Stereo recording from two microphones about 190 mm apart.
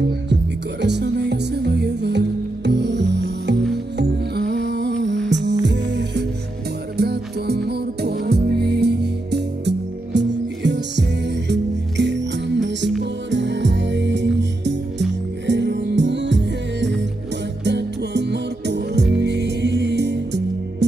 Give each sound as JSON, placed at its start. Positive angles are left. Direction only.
{"t": 0.0, "sound": "music", "side_deg": -65}
{"t": 7.0, "sound": "music", "side_deg": -55}